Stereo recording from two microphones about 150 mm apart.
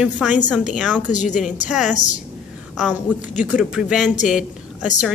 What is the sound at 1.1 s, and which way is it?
Speech, 55° left (ahead or behind).